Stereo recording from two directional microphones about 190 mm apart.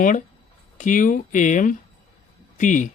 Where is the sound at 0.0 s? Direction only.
45° left (ahead or behind).